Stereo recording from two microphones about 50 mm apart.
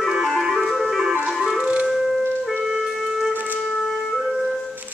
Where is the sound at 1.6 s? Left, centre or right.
Right.